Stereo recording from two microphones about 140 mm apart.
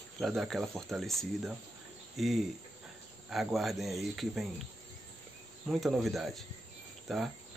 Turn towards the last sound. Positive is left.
turn(degrees=0)  # may be behind; listen again after turning